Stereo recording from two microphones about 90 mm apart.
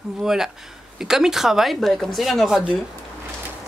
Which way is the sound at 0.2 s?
5° right (ahead or behind).